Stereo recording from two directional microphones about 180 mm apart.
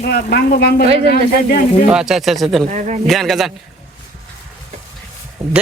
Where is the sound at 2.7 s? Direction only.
45° right (ahead or behind).